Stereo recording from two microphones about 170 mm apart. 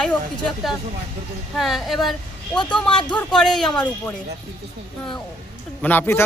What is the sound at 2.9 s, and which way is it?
Speech, 30° left (ahead or behind).